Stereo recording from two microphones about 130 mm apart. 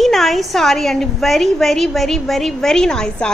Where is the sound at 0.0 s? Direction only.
Centre (ahead or behind).